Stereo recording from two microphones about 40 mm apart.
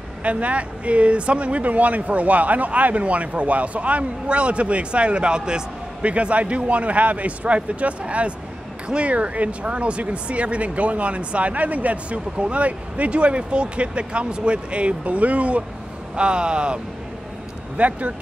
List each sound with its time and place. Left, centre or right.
0.2 s speech: right
16.2 s speech: right
17.7 s speech: right